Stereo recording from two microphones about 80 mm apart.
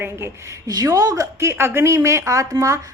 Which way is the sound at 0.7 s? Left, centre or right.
Right.